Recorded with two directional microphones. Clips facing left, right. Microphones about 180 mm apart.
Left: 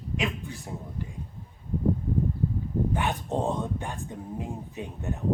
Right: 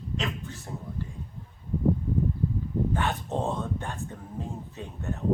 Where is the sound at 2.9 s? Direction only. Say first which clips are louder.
Left 1 dB; 15° left (ahead or behind).